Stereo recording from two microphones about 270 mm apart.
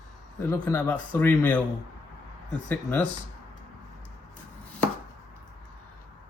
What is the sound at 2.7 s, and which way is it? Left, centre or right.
Speech, centre.